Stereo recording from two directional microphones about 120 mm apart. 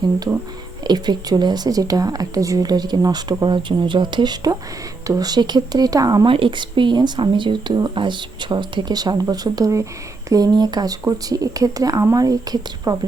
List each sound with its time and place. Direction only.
0.9 s speech: 35° right (ahead or behind)
6.2 s speech: 45° right (ahead or behind)